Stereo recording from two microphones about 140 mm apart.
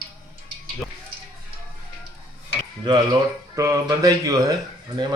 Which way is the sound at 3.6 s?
25° right (ahead or behind).